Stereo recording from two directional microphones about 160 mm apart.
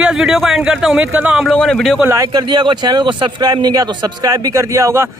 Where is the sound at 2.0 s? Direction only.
15° right (ahead or behind).